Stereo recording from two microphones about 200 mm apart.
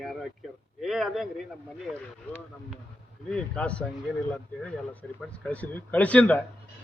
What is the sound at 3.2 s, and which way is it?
Speech, 5° left (ahead or behind).